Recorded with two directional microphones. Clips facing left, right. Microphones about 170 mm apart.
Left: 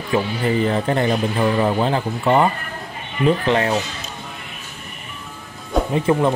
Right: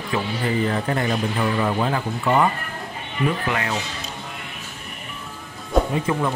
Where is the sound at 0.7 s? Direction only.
25° left (ahead or behind).